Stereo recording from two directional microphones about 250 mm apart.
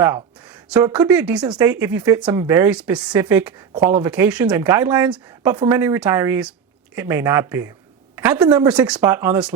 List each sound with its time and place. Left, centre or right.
0.7 s speech: centre
1.5 s speech: centre